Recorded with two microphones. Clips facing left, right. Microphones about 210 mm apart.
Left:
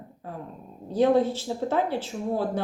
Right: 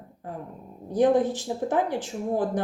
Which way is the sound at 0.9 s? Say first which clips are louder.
Even; 15° right (ahead or behind).